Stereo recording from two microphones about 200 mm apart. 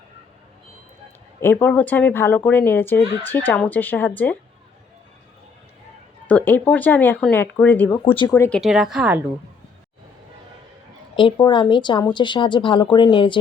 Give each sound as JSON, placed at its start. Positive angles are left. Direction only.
{"t": 1.4, "sound": "a woman's voice", "side_deg": 10}
{"t": 6.2, "sound": "a woman's voice", "side_deg": 10}
{"t": 8.0, "sound": "speech", "side_deg": 25}
{"t": 8.4, "sound": "speech", "side_deg": 5}
{"t": 11.1, "sound": "speech", "side_deg": 25}